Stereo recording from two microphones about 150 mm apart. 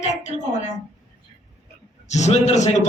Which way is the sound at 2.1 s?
50° left (ahead or behind).